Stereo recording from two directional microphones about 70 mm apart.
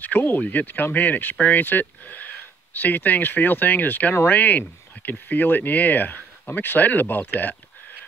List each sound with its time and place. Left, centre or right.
0.0 s speech: left